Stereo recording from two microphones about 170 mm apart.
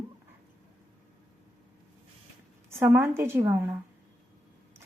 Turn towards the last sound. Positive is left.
turn(degrees=-15)  # may be behind; listen again after turning